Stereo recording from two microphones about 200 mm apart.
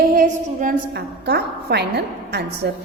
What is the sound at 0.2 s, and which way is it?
A woman's voice, 45° right (ahead or behind).